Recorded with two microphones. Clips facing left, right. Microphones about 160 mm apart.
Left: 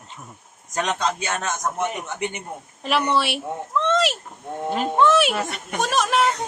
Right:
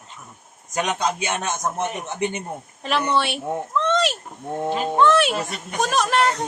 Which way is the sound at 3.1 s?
Centre (ahead or behind).